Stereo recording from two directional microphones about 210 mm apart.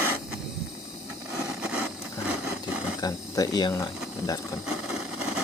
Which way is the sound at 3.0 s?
15° left (ahead or behind).